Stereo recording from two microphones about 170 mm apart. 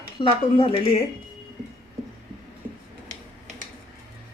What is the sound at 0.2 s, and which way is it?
Speech, 30° left (ahead or behind).